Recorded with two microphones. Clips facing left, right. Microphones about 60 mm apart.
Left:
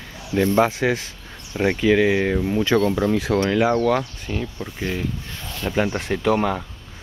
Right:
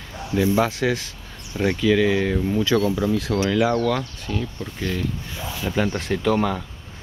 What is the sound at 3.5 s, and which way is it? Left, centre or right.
Speech, left.